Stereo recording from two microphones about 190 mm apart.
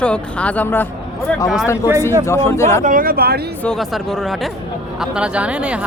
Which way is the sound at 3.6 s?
Centre (ahead or behind).